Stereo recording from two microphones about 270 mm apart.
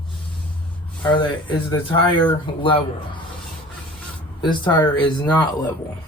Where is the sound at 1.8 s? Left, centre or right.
Centre.